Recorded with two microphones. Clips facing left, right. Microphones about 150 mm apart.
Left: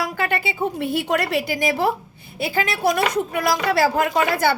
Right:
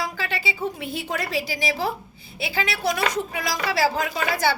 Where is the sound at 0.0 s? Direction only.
55° left (ahead or behind).